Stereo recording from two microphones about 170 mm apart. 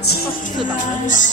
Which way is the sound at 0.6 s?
50° left (ahead or behind).